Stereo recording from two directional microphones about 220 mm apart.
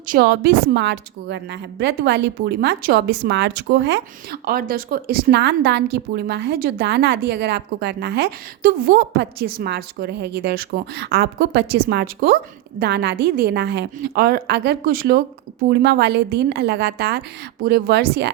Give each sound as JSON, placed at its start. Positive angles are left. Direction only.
{"t": 0.1, "sound": "a woman's voice", "side_deg": -45}